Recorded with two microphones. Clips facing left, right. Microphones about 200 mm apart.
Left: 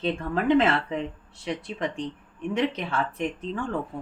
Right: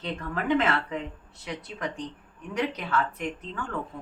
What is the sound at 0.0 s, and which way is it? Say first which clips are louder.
Speech: left 6 dB; 30° left (ahead or behind).